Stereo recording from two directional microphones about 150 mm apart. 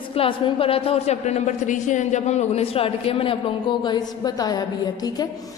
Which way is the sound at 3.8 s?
25° left (ahead or behind).